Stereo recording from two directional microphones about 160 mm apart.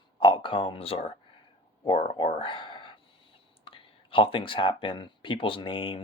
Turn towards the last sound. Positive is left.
turn(degrees=35)  # may be behind; listen again after turning